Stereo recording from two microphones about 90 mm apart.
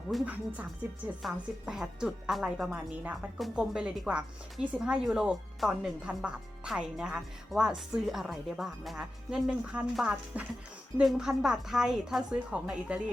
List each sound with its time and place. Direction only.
0.3 s speech: 15° right (ahead or behind)
1.6 s speech: 5° right (ahead or behind)
2.9 s speech: 15° right (ahead or behind)